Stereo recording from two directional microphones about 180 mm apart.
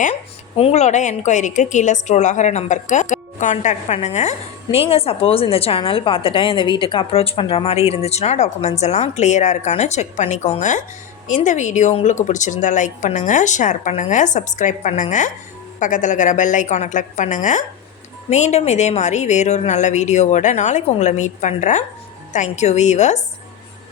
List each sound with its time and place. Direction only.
0.0 s a woman's voice: 40° left (ahead or behind)